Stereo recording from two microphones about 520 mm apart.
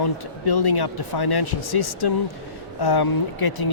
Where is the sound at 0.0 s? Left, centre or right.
Left.